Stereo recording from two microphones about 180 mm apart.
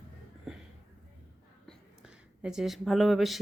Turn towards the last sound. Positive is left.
turn(degrees=0)  # may be behind; listen again after turning